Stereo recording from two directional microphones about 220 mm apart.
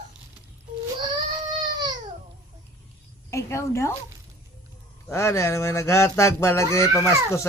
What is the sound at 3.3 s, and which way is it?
Speech, 15° left (ahead or behind).